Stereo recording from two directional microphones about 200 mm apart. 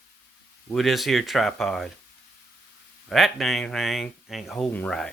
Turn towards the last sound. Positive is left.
turn(degrees=5)  # may be behind; listen again after turning